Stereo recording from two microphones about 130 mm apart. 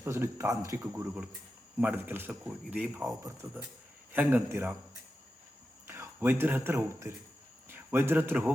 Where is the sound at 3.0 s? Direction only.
25° right (ahead or behind).